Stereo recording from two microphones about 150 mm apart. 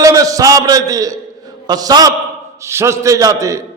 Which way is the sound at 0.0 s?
20° right (ahead or behind).